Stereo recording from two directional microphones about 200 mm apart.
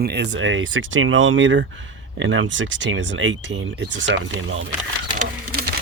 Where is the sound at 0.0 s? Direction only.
55° right (ahead or behind); by 4.6 s 75° right (ahead or behind).